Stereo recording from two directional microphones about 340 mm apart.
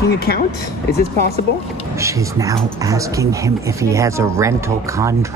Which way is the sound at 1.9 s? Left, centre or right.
Centre.